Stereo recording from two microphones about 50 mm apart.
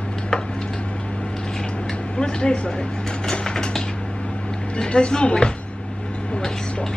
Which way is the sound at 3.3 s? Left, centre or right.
Centre.